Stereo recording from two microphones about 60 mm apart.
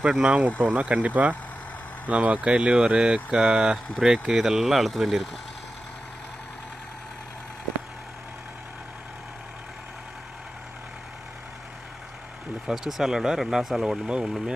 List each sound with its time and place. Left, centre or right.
0.0 s speech: centre
12.6 s speech: centre